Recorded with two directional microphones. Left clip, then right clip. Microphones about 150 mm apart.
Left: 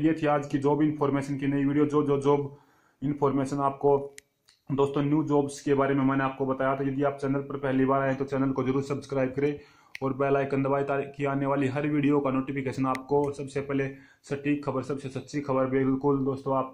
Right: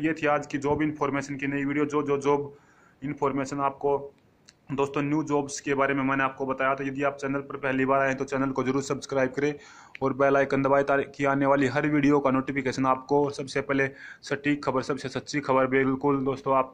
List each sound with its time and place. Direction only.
0.4 s speech: 5° right (ahead or behind)
4.6 s speech: 10° right (ahead or behind)
6.9 s speech: 25° right (ahead or behind)
13.1 s speech: 65° right (ahead or behind)
13.5 s speech: 35° right (ahead or behind)